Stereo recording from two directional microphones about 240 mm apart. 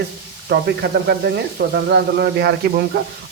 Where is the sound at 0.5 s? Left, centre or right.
Right.